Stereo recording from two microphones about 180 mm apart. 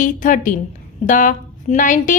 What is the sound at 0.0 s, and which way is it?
A woman's voice, 45° left (ahead or behind).